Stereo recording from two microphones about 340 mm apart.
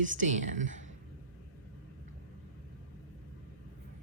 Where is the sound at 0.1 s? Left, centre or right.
Right.